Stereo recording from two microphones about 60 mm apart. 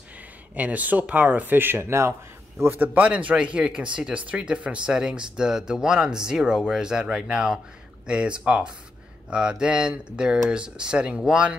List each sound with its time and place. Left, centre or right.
0.6 s speech: right
2.7 s speech: right; by 11.5 s centre